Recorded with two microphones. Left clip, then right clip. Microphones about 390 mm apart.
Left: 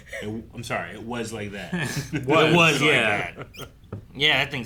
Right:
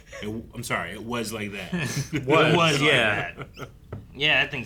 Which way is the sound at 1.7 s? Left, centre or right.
Centre.